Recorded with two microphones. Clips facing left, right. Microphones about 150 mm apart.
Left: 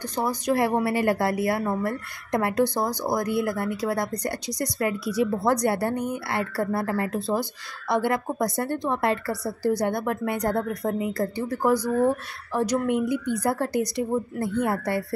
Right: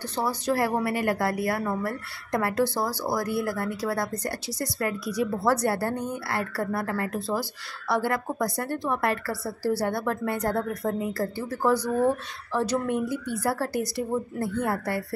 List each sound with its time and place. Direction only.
0.1 s a woman's voice: 15° left (ahead or behind)